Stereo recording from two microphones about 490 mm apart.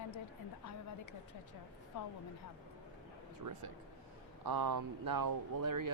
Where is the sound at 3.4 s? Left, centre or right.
Right.